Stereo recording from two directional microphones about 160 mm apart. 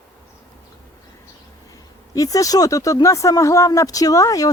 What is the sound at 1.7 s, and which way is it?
Speech, 20° left (ahead or behind).